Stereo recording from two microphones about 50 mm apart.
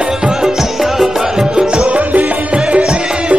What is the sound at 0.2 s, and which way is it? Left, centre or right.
Music, centre.